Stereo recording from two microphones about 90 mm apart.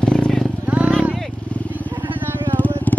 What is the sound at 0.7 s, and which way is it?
Vehicle, 15° right (ahead or behind).